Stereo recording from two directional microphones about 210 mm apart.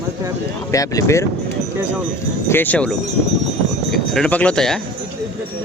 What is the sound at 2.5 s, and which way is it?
Speech, 10° left (ahead or behind).